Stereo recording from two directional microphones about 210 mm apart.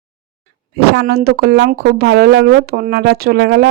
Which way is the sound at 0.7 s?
50° right (ahead or behind).